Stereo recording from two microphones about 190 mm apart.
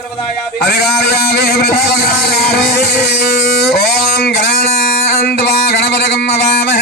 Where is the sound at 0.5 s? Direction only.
55° left (ahead or behind).